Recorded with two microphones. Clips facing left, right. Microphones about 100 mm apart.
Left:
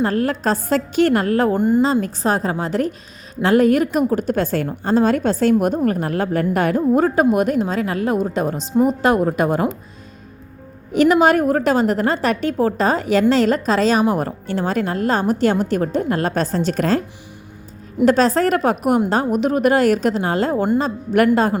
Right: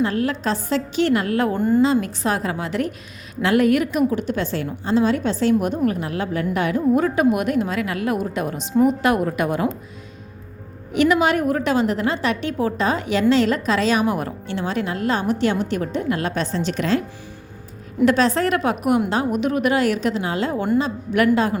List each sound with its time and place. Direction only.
0.0 s a woman's voice: 45° left (ahead or behind)
1.5 s a woman's voice: 20° left (ahead or behind)
1.8 s a woman's voice: 35° left (ahead or behind)
10.9 s a woman's voice: 40° left (ahead or behind)
18.0 s a woman's voice: 40° left (ahead or behind)